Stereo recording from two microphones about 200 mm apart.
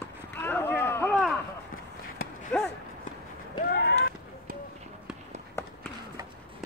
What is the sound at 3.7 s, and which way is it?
Run, 55° left (ahead or behind).